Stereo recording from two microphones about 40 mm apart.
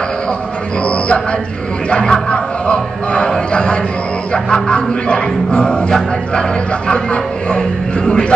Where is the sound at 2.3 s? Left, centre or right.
Left.